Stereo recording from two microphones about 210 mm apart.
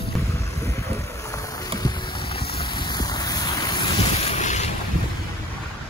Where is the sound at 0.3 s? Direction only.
15° left (ahead or behind); by 4.6 s 35° left (ahead or behind).